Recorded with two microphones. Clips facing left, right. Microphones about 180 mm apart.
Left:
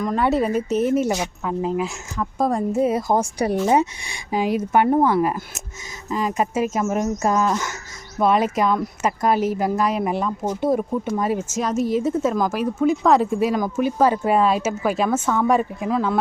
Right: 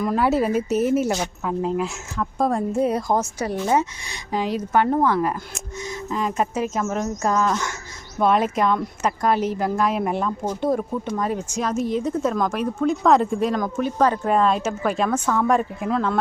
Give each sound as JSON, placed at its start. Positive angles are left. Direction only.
{"t": 0.0, "sound": "speech", "side_deg": -5}
{"t": 3.2, "sound": "speech", "side_deg": 15}